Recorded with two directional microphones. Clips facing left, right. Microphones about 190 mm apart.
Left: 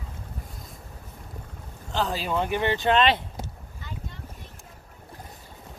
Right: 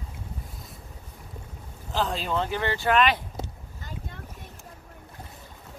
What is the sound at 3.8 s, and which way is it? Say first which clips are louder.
Boat: even; 45° right (ahead or behind).